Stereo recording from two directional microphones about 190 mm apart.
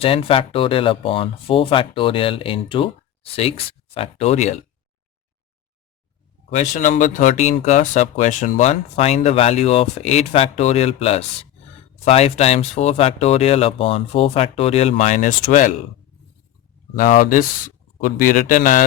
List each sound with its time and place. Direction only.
0.0 s speech: 30° left (ahead or behind)
3.9 s speech: 30° left (ahead or behind)
6.5 s speech: 40° left (ahead or behind)
16.9 s a man's voice: 45° left (ahead or behind)